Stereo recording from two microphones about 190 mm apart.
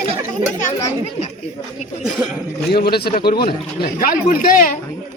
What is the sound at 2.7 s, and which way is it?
A man's voice, 55° left (ahead or behind).